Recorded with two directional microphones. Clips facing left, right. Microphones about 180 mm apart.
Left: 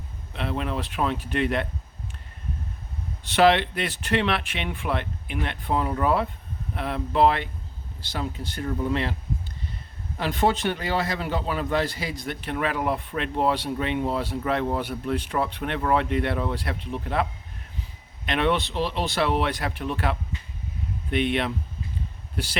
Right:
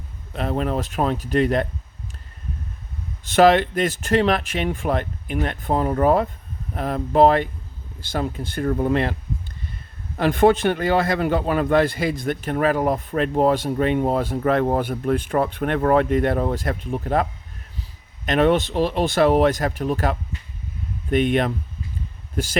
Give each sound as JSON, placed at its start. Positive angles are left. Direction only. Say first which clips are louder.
{"t": 0.3, "sound": "speech", "louder": "right 5 dB", "side_deg": -45}
{"t": 3.2, "sound": "a man's voice", "louder": "right 4 dB", "side_deg": -45}
{"t": 10.2, "sound": "a man's voice", "louder": "right 7 dB", "side_deg": -55}
{"t": 18.3, "sound": "a man's voice", "louder": "right 6 dB", "side_deg": -45}